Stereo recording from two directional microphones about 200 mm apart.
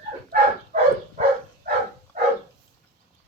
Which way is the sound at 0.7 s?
40° right (ahead or behind).